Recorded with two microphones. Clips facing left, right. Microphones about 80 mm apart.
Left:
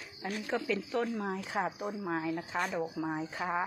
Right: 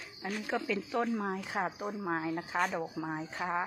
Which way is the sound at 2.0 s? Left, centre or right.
Centre.